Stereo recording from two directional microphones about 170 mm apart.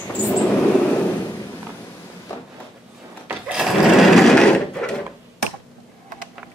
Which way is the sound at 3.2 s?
5° right (ahead or behind).